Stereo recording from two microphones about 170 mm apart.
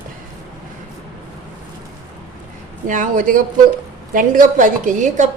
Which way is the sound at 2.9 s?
50° right (ahead or behind).